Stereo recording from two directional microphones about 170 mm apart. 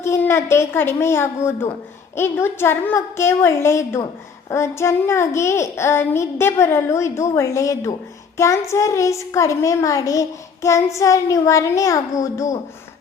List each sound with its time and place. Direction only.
0.0 s a child's voice: 15° left (ahead or behind)